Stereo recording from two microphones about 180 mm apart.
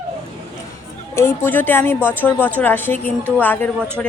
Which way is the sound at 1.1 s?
15° left (ahead or behind).